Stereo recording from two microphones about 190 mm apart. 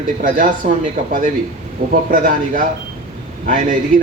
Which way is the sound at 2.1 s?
45° right (ahead or behind).